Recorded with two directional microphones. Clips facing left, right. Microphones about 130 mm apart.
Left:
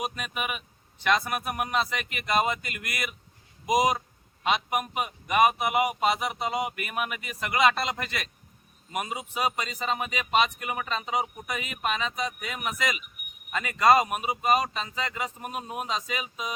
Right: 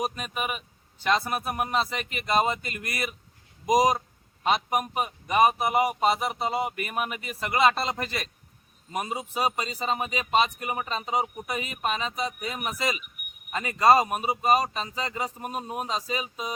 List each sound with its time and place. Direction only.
0.0 s speech: 35° right (ahead or behind)